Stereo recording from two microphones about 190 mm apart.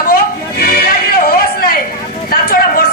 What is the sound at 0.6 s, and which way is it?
Music, 50° left (ahead or behind).